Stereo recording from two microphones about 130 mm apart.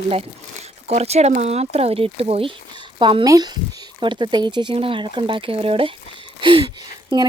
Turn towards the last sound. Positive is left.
turn(degrees=-40)  # may be behind; listen again after turning